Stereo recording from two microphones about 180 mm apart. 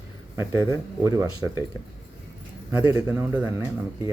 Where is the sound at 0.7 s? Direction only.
20° right (ahead or behind).